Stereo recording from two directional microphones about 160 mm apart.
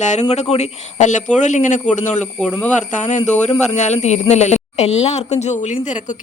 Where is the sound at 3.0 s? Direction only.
45° left (ahead or behind).